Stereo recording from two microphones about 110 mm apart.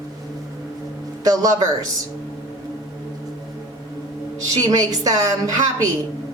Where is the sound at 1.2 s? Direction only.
35° right (ahead or behind).